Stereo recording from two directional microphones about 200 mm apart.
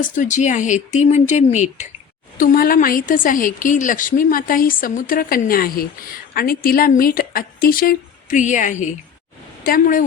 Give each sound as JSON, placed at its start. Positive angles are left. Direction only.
{"t": 0.0, "sound": "a woman's voice", "side_deg": 40}